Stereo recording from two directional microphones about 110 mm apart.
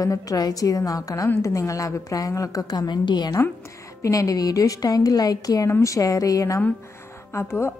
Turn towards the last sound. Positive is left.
turn(degrees=25)  # may be behind; listen again after turning